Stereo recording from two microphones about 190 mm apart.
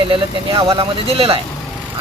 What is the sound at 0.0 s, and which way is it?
Speech, 30° right (ahead or behind).